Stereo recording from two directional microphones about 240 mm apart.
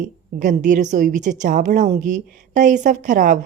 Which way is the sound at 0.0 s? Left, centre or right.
Right.